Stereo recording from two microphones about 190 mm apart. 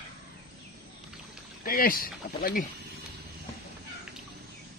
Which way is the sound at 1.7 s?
50° left (ahead or behind).